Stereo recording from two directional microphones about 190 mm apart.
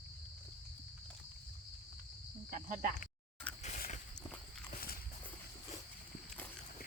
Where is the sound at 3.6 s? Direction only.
40° left (ahead or behind).